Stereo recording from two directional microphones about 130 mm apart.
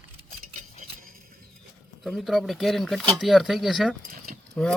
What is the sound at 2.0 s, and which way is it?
Speech, centre (ahead or behind).